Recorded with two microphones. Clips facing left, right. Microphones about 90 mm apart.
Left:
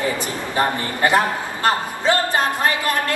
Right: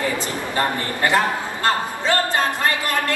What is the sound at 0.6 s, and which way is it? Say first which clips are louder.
A man's voice: left 2 dB; 20° left (ahead or behind).